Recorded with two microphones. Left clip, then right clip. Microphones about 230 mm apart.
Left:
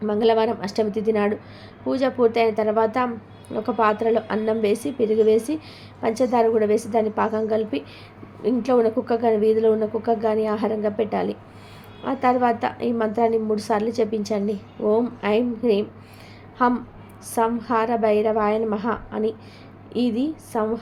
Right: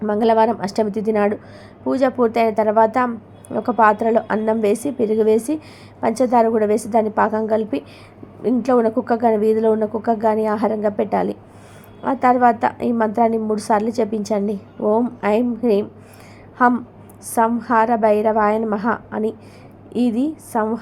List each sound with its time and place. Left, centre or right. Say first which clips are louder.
0.0 s a woman's voice: right 4 dB; centre